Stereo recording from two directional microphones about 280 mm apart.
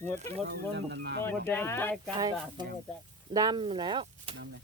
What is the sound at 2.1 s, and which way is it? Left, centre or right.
Speech, centre.